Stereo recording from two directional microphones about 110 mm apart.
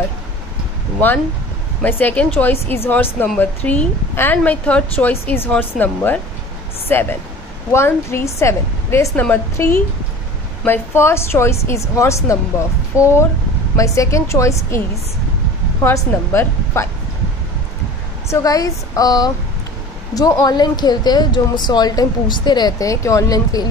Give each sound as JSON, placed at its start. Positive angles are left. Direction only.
{"t": 1.8, "sound": "a woman's voice", "side_deg": 15}
{"t": 15.8, "sound": "a woman's voice", "side_deg": 25}
{"t": 18.3, "sound": "speech", "side_deg": 35}